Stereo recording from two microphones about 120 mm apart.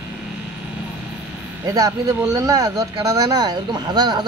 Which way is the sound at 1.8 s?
30° right (ahead or behind).